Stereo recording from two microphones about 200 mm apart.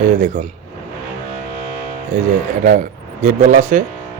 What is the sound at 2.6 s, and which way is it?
Speech, 40° right (ahead or behind).